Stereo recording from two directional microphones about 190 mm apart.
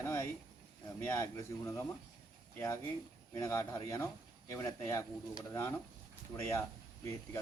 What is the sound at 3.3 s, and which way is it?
Speech, 15° left (ahead or behind).